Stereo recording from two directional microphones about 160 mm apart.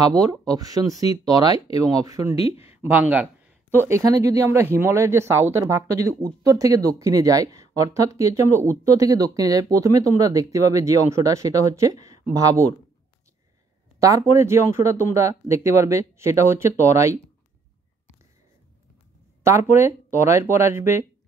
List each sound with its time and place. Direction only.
0.0 s speech: 25° right (ahead or behind)
13.9 s speech: 20° right (ahead or behind)
19.4 s speech: 15° right (ahead or behind)